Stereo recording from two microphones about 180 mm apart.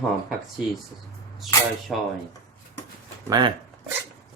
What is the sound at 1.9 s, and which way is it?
Speech, centre (ahead or behind).